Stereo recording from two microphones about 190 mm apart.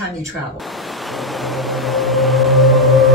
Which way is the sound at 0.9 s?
Centre (ahead or behind).